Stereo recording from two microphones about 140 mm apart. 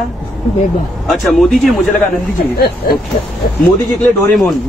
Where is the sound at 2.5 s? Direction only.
90° left.